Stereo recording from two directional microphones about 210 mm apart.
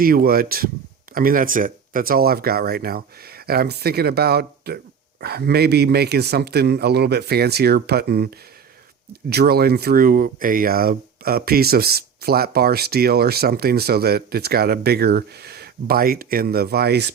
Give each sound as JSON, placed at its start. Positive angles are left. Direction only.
{"t": 0.0, "sound": "speech", "side_deg": -45}